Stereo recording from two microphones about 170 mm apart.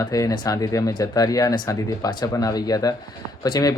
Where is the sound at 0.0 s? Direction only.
20° left (ahead or behind).